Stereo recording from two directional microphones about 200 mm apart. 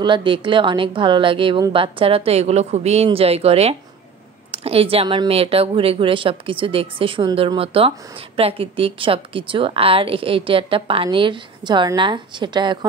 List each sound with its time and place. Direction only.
0.0 s a woman's voice: 25° right (ahead or behind)